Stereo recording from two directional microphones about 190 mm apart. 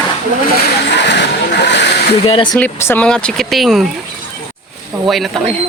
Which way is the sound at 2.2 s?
25° left (ahead or behind).